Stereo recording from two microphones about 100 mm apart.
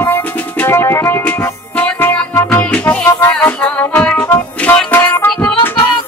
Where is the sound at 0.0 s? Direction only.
20° left (ahead or behind).